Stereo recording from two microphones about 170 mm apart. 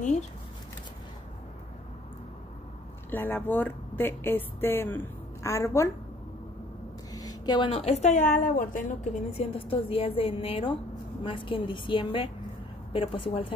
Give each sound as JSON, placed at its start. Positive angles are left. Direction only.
{"t": 3.1, "sound": "speech", "side_deg": 10}
{"t": 7.2, "sound": "a woman's voice", "side_deg": 25}
{"t": 9.4, "sound": "a woman's voice", "side_deg": 35}